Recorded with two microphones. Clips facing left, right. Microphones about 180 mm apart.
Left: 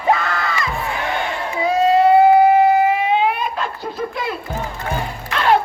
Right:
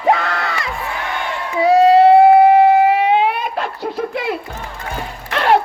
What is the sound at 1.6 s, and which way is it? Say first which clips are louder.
Crowd: right 5 dB; 75° right (ahead or behind).